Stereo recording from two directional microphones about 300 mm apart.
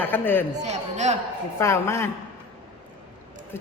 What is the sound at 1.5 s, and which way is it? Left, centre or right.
Speech, centre.